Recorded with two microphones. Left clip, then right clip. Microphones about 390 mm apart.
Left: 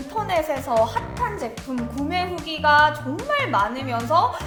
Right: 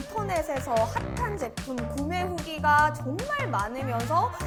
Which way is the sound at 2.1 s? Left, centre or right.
Right.